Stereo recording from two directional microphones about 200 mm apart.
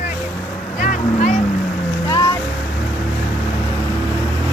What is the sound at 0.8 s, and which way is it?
Boat, 35° left (ahead or behind).